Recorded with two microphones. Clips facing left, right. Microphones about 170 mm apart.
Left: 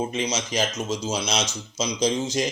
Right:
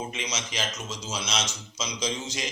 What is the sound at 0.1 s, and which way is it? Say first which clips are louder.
Speech: left 8 dB; 35° left (ahead or behind).